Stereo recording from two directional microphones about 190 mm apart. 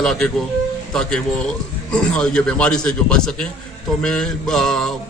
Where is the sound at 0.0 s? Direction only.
Centre (ahead or behind).